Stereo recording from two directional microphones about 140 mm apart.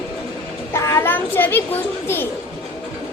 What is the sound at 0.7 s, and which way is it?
A child's voice, 20° left (ahead or behind).